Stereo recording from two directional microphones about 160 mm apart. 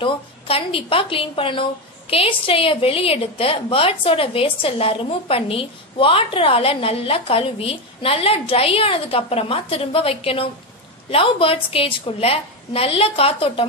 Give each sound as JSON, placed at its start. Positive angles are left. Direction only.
{"t": 0.0, "sound": "a woman's voice", "side_deg": 35}